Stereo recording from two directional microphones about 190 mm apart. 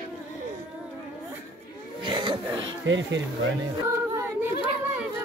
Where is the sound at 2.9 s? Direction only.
75° right (ahead or behind).